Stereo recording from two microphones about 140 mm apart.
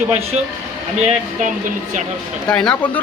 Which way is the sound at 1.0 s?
60° right (ahead or behind).